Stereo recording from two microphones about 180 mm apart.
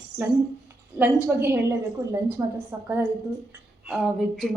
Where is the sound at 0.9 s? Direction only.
10° right (ahead or behind).